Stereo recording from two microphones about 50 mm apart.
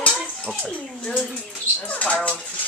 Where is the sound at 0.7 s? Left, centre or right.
Centre.